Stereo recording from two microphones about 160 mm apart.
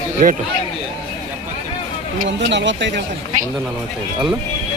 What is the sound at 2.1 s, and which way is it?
Speech, 75° right (ahead or behind).